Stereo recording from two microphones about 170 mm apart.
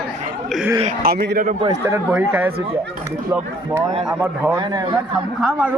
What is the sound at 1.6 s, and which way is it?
Speech, 20° right (ahead or behind).